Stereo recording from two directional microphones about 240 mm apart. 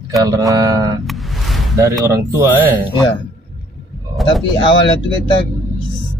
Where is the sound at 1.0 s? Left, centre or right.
Centre.